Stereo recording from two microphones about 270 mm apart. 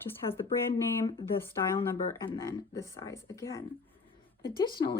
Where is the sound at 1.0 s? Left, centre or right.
Centre.